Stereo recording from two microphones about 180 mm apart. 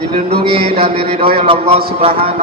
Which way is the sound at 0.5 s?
30° right (ahead or behind).